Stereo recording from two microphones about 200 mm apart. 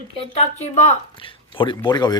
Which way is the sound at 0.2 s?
30° left (ahead or behind).